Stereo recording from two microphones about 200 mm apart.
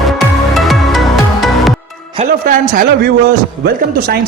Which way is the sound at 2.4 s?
45° right (ahead or behind).